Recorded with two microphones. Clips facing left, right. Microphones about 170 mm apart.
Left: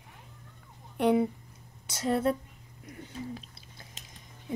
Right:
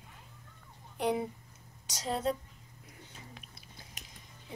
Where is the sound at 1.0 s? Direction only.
60° left (ahead or behind).